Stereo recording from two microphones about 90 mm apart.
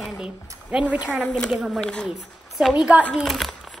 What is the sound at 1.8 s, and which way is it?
Speech, 10° left (ahead or behind).